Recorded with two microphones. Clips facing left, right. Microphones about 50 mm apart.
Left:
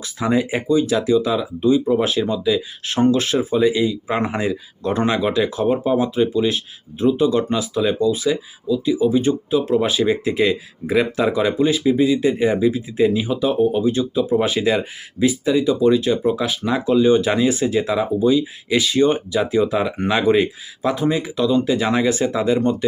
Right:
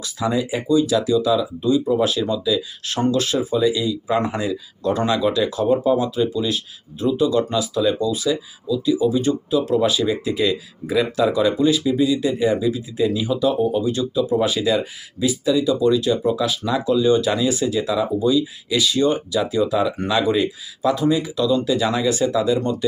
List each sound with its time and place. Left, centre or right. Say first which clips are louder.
0.0 s speech: left 2 dB; left